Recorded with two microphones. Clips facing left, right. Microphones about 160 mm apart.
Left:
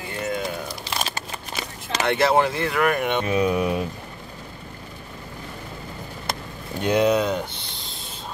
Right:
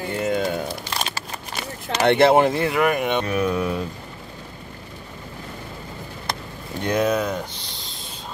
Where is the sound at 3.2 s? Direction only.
20° left (ahead or behind).